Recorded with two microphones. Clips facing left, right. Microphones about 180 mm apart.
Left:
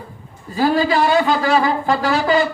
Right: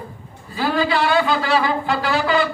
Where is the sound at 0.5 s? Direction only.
45° left (ahead or behind).